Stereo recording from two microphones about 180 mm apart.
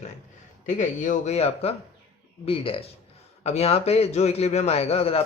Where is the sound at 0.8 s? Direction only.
40° left (ahead or behind).